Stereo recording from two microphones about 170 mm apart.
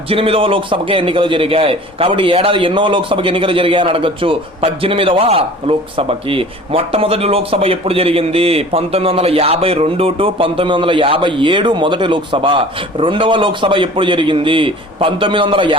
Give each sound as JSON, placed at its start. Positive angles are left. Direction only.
{"t": 0.1, "sound": "a man's voice", "side_deg": -35}